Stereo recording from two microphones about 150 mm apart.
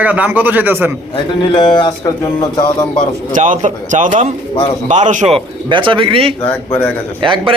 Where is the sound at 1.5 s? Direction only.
30° left (ahead or behind).